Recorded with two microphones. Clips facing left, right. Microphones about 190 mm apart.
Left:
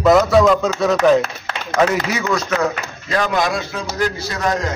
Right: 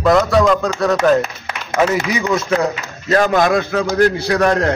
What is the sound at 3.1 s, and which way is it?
Speech, 45° right (ahead or behind).